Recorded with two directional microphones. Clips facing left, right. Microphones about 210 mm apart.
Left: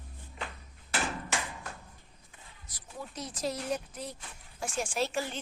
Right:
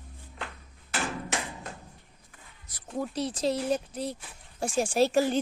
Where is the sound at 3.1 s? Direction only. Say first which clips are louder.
Right 6 dB; 30° right (ahead or behind).